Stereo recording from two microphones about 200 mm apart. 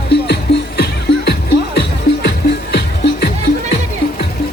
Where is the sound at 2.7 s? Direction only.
55° left (ahead or behind).